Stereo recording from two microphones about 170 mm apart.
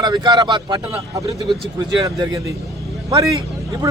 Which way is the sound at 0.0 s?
25° right (ahead or behind).